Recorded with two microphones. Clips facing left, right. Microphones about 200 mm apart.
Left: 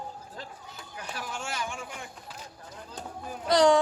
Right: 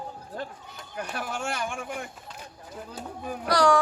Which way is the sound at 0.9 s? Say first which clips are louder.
Right 5 dB; 60° right (ahead or behind).